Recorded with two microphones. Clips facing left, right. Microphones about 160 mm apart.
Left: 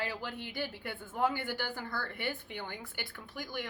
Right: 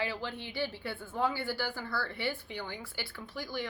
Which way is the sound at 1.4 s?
20° left (ahead or behind).